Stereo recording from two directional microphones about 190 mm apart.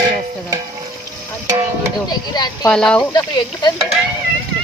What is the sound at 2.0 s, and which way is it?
Speech, 20° left (ahead or behind).